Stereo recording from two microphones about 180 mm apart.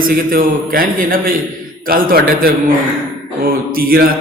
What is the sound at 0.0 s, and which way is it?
A man's voice, 50° right (ahead or behind).